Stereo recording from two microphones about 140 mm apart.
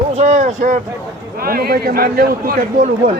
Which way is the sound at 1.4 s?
90° right.